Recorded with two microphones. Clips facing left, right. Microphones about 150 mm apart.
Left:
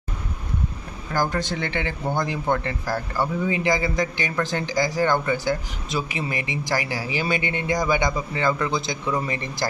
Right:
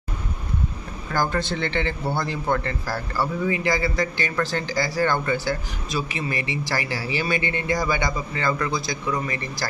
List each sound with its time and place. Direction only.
1.1 s a man's voice: 15° left (ahead or behind)